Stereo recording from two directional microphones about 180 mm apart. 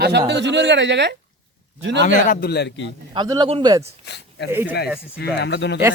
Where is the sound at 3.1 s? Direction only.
25° right (ahead or behind).